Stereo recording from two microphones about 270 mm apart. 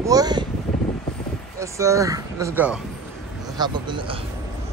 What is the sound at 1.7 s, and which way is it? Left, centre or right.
A man's voice, centre.